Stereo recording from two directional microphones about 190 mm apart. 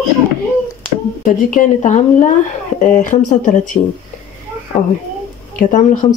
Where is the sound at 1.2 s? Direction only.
45° left (ahead or behind).